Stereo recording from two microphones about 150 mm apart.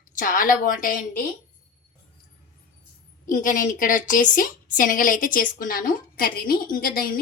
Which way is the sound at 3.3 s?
60° left (ahead or behind).